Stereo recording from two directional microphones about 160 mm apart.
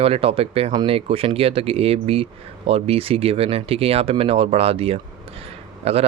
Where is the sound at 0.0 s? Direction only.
35° right (ahead or behind).